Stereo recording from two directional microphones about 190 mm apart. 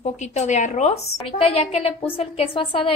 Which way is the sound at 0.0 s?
35° left (ahead or behind).